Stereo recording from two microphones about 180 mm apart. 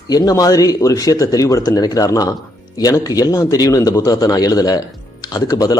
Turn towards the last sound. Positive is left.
turn(degrees=20)  # may be behind; listen again after turning